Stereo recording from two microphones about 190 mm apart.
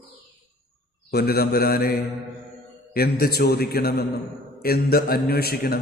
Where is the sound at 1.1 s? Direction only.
55° left (ahead or behind).